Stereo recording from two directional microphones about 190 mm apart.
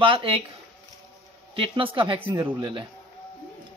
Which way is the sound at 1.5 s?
25° right (ahead or behind).